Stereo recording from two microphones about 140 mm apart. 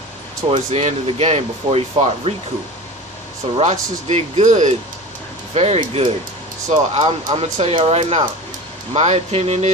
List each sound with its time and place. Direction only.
0.5 s speech: 50° right (ahead or behind)
3.5 s speech: 50° right (ahead or behind)
5.8 s speech: 40° right (ahead or behind)
6.7 s speech: 50° right (ahead or behind)